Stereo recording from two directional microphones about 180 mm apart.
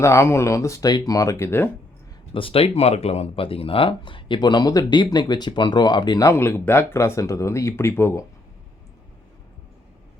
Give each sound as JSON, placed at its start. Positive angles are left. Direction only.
{"t": 0.0, "sound": "speech", "side_deg": 15}
{"t": 2.3, "sound": "speech", "side_deg": 30}